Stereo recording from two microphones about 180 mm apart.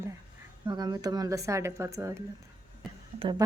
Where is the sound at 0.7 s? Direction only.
20° right (ahead or behind).